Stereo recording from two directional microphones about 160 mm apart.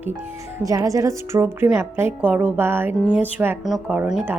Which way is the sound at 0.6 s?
20° right (ahead or behind).